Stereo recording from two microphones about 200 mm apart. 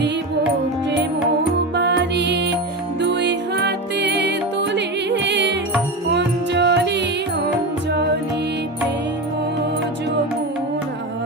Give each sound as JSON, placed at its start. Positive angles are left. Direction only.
{"t": 1.7, "sound": "music", "side_deg": -60}